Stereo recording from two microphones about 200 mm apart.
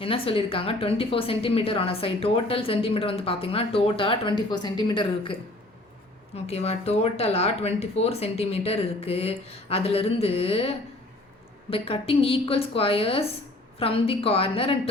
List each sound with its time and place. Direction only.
0.0 s a woman's voice: 25° left (ahead or behind)